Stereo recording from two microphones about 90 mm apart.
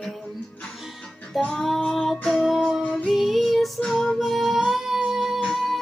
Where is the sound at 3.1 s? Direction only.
Centre (ahead or behind).